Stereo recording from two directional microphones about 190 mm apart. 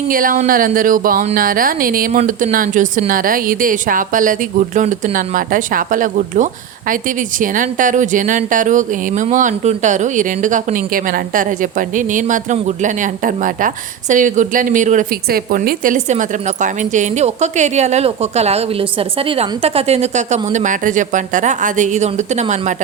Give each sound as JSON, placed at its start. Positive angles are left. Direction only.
{"t": 0.1, "sound": "a woman's voice", "side_deg": -45}